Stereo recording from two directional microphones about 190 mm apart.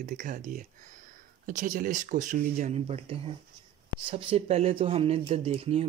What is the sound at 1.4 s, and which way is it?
Speech, 45° right (ahead or behind).